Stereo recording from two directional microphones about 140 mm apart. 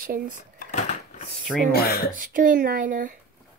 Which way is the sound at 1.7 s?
90° left.